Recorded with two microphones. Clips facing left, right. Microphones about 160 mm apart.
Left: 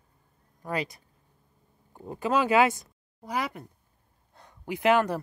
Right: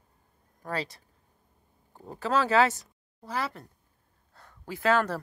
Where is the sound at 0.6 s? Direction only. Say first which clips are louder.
Left 2 dB; 10° left (ahead or behind).